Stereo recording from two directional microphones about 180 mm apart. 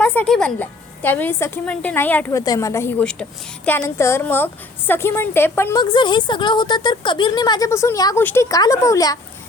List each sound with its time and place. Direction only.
0.0 s a woman's voice: 10° left (ahead or behind)
3.0 s a woman's voice: 5° left (ahead or behind)